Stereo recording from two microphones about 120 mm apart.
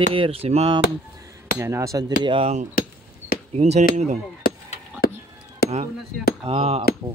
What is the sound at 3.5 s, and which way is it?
Speech, 70° right (ahead or behind).